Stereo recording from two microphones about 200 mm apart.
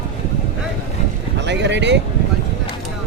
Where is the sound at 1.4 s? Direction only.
60° right (ahead or behind).